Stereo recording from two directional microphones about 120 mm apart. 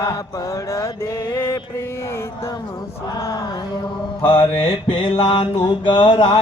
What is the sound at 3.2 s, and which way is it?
Mantra, 25° left (ahead or behind).